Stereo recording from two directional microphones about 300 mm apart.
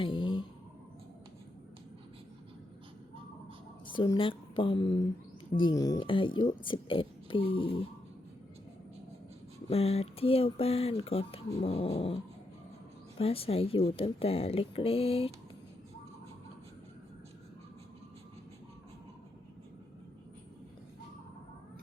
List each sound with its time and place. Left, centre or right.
0.0 s a sound: centre
3.9 s speech: centre
9.6 s speech: centre